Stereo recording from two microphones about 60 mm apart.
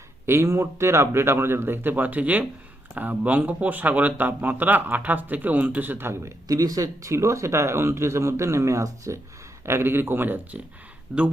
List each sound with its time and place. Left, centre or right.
0.3 s speech: right
6.5 s speech: right
9.6 s speech: right
11.1 s speech: centre